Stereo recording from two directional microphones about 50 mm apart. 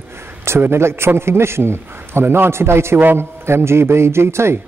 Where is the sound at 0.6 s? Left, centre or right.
Right.